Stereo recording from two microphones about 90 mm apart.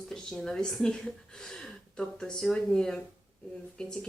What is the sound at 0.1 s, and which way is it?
Speech, 5° left (ahead or behind).